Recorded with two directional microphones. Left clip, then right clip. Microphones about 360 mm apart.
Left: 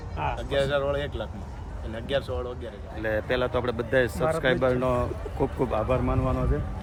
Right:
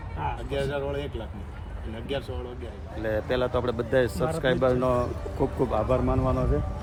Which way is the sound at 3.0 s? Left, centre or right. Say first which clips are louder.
Even; centre.